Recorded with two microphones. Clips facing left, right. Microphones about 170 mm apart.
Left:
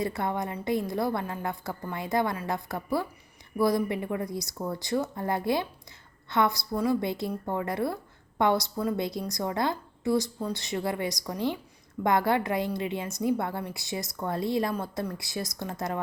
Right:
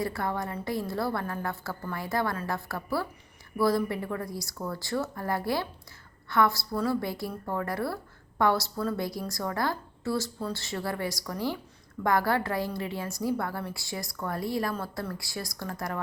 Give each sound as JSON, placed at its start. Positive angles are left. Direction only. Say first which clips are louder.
{"t": 0.0, "sound": "a woman's voice", "louder": "left 1 dB", "side_deg": 20}